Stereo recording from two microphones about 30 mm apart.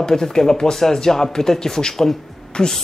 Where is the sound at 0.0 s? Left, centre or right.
Left.